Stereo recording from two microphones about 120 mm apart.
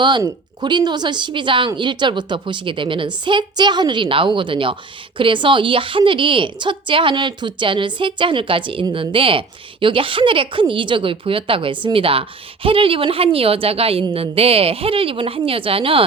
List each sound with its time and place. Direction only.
0.2 s speech: 35° right (ahead or behind)